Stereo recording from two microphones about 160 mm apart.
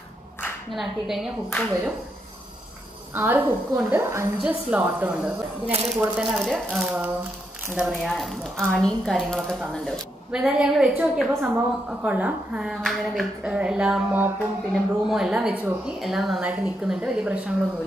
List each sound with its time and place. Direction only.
0.7 s a woman's voice: centre (ahead or behind)
3.2 s a woman's voice: 15° right (ahead or behind)
4.4 s a woman's voice: 5° right (ahead or behind)